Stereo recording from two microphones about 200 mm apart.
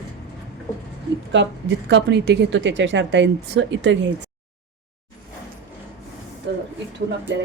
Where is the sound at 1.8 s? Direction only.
60° right (ahead or behind).